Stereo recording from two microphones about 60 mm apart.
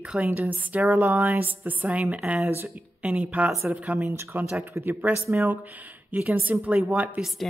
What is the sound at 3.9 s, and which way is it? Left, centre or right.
Speech, right.